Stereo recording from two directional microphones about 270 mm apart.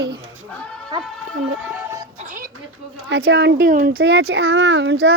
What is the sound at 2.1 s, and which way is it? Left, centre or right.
Music, right.